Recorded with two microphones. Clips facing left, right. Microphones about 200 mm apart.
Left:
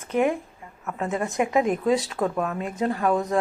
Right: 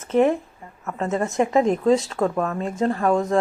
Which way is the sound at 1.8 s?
5° left (ahead or behind).